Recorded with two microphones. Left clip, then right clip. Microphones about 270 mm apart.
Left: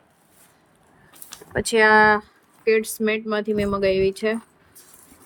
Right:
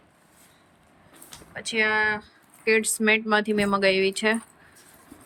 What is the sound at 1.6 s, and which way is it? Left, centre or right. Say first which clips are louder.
Speech: left 8 dB; centre.